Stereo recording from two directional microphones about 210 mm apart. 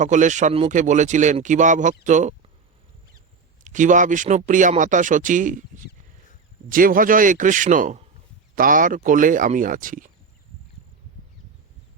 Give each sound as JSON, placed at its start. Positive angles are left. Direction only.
{"t": 0.0, "sound": "speech", "side_deg": -35}
{"t": 3.6, "sound": "speech", "side_deg": -35}